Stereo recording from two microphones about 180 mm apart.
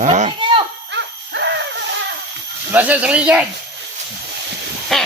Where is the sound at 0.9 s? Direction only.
75° right (ahead or behind).